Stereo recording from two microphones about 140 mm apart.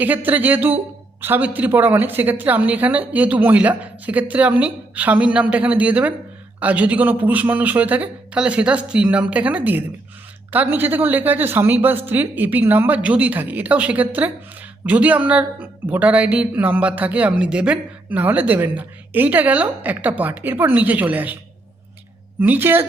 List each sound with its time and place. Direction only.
0.0 s speech: 10° right (ahead or behind)
22.4 s speech: 15° right (ahead or behind)